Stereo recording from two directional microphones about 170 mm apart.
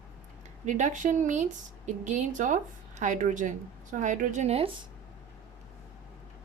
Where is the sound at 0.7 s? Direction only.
45° right (ahead or behind).